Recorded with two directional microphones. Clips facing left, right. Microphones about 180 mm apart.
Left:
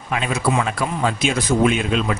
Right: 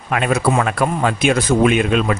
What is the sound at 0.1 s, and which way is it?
A man's voice, 60° right (ahead or behind).